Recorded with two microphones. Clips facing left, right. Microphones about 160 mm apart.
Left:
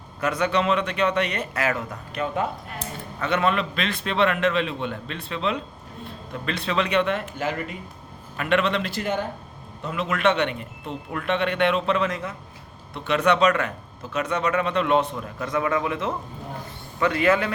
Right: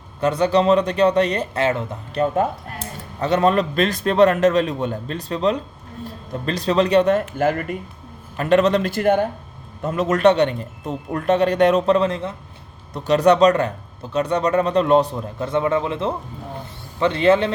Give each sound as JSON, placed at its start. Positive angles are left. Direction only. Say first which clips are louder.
{"t": 0.2, "sound": "speech", "louder": "right 6 dB", "side_deg": -30}
{"t": 2.2, "sound": "a man's voice", "louder": "right 6 dB", "side_deg": -45}
{"t": 8.4, "sound": "a man's voice", "louder": "right 7 dB", "side_deg": -40}
{"t": 9.8, "sound": "speech", "louder": "right 7 dB", "side_deg": -45}